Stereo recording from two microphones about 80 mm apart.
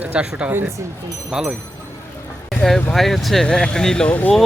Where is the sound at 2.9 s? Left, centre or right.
Centre.